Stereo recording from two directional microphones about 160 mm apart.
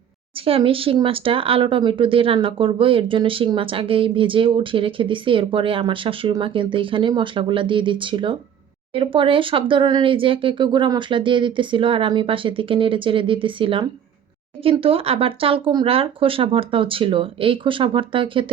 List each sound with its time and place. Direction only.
0.4 s speech: 35° right (ahead or behind)